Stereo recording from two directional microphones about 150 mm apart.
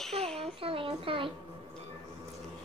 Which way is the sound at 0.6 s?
35° right (ahead or behind).